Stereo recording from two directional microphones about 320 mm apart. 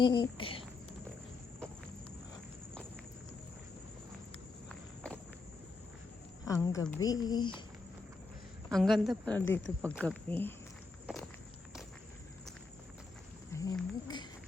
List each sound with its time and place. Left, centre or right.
0.0 s a woman's voice: centre
4.7 s walk: centre
6.4 s a woman's voice: centre
8.7 s a woman's voice: centre
11.0 s walk: centre
13.5 s a sound: centre